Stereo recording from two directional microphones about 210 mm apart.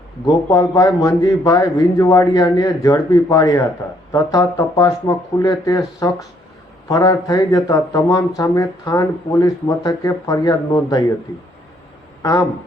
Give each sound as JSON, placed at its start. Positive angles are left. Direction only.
{"t": 0.3, "sound": "speech", "side_deg": 15}
{"t": 12.2, "sound": "speech", "side_deg": 15}